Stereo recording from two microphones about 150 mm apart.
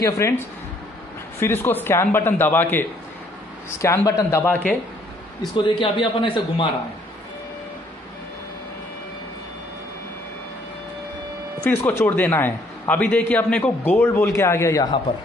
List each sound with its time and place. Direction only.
0.0 s speech: 20° left (ahead or behind)
1.4 s a man's voice: 15° left (ahead or behind)
5.8 s speech: 35° left (ahead or behind)
11.6 s a man's voice: 15° left (ahead or behind)